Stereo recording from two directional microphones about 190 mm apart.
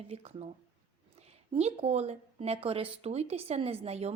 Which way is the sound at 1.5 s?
35° right (ahead or behind).